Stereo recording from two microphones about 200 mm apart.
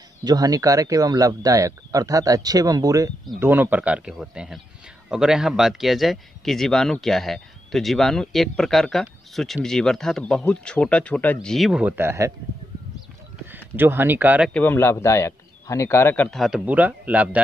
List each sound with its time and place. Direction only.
0.2 s speech: 20° right (ahead or behind)
13.5 s speech: 10° right (ahead or behind)
14.5 s a man's voice: 10° left (ahead or behind); by 17.4 s 5° right (ahead or behind)